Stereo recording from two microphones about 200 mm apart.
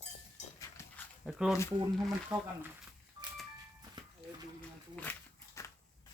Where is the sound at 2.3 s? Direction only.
20° right (ahead or behind).